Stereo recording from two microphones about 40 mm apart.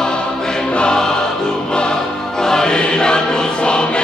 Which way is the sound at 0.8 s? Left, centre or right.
Left.